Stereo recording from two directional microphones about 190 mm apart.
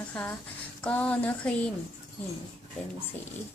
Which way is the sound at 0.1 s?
10° left (ahead or behind).